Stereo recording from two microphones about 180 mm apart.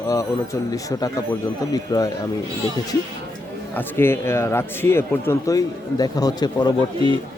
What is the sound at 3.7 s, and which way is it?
Speech, 15° left (ahead or behind).